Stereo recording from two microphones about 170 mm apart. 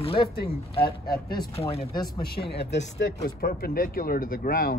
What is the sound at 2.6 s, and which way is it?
Speech, 90° left.